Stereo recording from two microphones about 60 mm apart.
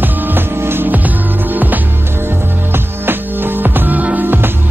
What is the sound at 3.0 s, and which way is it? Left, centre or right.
Music, right.